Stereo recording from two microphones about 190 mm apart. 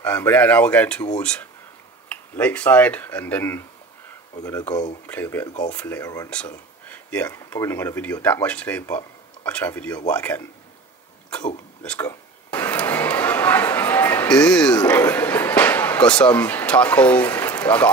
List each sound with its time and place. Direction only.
0.0 s speech: 10° left (ahead or behind)
2.0 s speech: 10° left (ahead or behind)
11.8 s speech: 5° left (ahead or behind)
12.1 s a sound: 10° left (ahead or behind)